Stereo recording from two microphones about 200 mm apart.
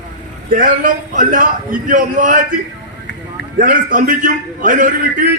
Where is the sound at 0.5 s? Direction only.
40° right (ahead or behind).